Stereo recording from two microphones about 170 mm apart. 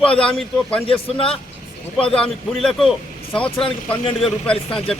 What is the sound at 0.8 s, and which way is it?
Speech, 35° left (ahead or behind).